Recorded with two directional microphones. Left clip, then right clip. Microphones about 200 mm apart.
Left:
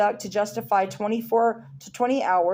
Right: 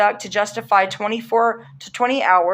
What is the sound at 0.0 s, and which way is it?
Speech, 50° left (ahead or behind).